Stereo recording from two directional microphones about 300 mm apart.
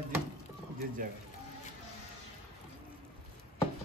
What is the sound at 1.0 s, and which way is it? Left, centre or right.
Speech, right.